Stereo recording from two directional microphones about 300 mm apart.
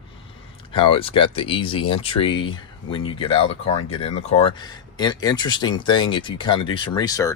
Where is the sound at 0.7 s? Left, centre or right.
Centre.